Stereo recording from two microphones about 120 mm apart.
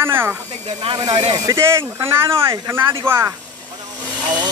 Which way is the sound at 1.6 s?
20° right (ahead or behind).